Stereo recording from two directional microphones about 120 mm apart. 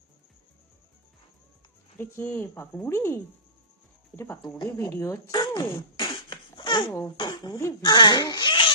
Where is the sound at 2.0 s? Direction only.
25° left (ahead or behind).